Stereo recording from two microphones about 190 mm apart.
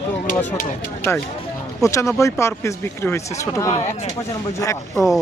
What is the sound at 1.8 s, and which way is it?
Speech, 15° left (ahead or behind).